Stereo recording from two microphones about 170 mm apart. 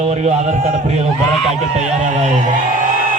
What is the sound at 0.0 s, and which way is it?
A man's voice, 40° right (ahead or behind).